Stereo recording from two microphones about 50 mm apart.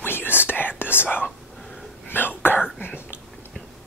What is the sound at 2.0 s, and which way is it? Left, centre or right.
Whispering, left.